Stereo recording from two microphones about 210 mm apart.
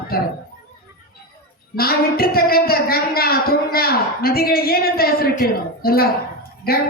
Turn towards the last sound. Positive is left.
turn(degrees=45)  # may be behind; listen again after turning